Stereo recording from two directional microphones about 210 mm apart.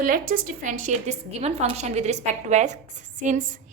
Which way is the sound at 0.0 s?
40° right (ahead or behind).